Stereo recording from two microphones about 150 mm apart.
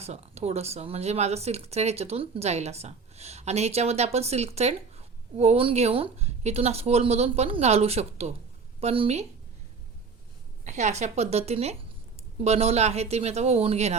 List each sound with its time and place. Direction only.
0.0 s speech: 45° right (ahead or behind)
10.6 s speech: 50° right (ahead or behind)